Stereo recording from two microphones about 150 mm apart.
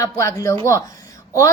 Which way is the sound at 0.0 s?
20° left (ahead or behind).